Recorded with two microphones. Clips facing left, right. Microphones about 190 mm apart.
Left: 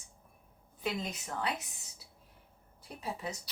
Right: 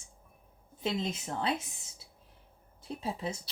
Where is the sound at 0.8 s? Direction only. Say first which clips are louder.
Right 3 dB; 25° right (ahead or behind).